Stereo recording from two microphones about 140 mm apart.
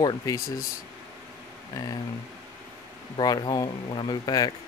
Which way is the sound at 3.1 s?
30° left (ahead or behind).